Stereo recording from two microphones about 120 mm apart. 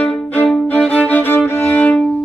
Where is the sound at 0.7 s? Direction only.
10° left (ahead or behind).